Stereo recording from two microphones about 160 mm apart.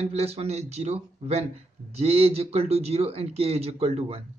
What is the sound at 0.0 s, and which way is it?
Speech, 40° right (ahead or behind).